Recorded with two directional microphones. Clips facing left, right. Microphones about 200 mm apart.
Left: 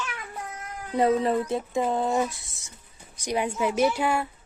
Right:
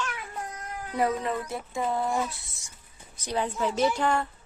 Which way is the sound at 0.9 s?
25° left (ahead or behind).